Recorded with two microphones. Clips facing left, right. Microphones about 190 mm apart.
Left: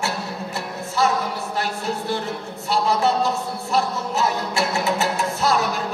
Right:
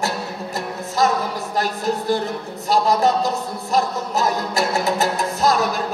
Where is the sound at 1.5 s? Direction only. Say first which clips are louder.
Right 6 dB; 40° right (ahead or behind).